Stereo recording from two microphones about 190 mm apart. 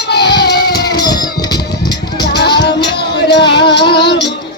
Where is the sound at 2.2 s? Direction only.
60° left (ahead or behind).